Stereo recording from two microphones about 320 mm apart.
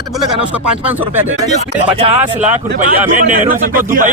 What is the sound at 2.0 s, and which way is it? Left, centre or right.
Speech, centre.